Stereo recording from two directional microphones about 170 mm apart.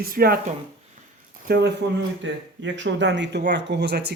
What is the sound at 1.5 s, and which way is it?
Speech, 75° right (ahead or behind).